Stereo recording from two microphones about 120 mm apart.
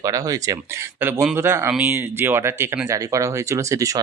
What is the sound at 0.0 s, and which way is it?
Speech, 30° right (ahead or behind).